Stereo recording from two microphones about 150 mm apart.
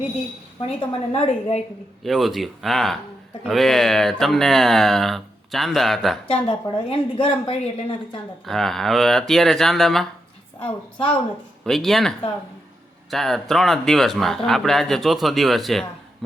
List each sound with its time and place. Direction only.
0.6 s a woman's voice: 40° left (ahead or behind)
2.0 s speech: centre (ahead or behind)
6.2 s a woman's voice: 40° left (ahead or behind)
8.4 s speech: centre (ahead or behind)
10.6 s a woman's voice: 35° left (ahead or behind)
11.6 s speech: centre (ahead or behind)